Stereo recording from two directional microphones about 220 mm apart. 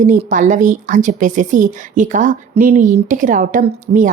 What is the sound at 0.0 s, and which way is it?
A woman's voice, 35° right (ahead or behind).